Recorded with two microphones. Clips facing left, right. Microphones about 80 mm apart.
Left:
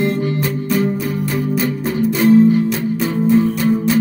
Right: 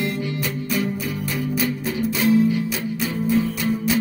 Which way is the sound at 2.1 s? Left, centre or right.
Left.